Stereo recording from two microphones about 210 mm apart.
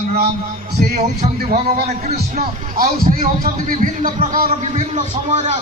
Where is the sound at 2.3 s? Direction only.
40° right (ahead or behind).